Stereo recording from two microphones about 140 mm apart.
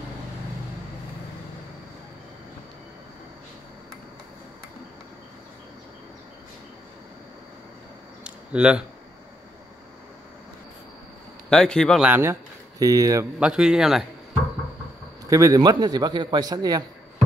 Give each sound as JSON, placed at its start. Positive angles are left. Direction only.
{"t": 8.2, "sound": "a sound", "side_deg": -10}
{"t": 11.5, "sound": "speech", "side_deg": 5}
{"t": 12.0, "sound": "speech", "side_deg": -15}
{"t": 13.4, "sound": "speech", "side_deg": -5}
{"t": 15.2, "sound": "a man's voice", "side_deg": -25}